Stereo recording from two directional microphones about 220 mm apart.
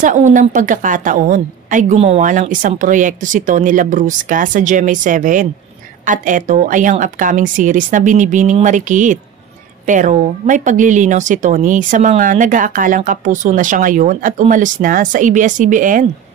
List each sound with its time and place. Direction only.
0.0 s speech: 35° right (ahead or behind)